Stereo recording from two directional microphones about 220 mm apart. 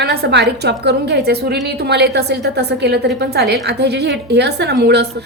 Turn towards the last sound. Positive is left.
turn(degrees=-50)  # may be behind; listen again after turning